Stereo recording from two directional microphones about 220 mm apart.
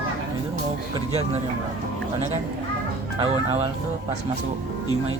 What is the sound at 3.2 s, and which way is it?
Speech, 25° right (ahead or behind).